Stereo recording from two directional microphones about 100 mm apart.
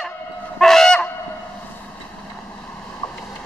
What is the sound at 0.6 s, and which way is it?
Goose, 5° left (ahead or behind).